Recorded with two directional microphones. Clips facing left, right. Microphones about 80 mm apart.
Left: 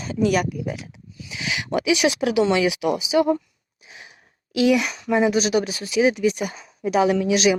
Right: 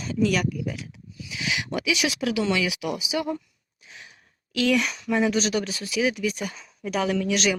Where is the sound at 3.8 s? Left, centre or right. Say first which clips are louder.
Left 2 dB; centre.